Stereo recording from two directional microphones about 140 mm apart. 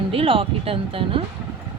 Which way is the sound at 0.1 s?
40° right (ahead or behind).